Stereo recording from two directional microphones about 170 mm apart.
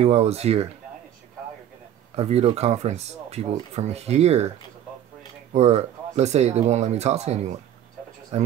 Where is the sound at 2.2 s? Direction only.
35° right (ahead or behind).